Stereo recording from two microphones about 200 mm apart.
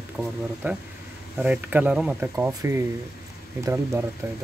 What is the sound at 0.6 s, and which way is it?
Speech, 10° right (ahead or behind).